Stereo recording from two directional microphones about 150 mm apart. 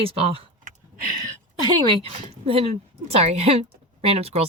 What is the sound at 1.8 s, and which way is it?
A woman's voice, 40° right (ahead or behind).